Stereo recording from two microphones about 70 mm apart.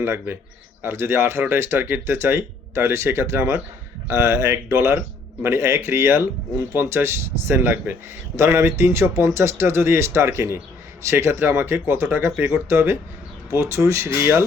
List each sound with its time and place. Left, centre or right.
0.0 s speech: right
4.1 s speech: right
4.9 s speech: right